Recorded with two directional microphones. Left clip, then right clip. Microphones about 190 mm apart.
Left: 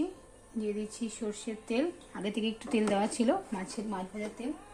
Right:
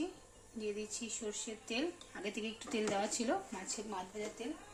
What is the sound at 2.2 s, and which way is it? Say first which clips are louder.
Speech: left 7 dB; 35° left (ahead or behind).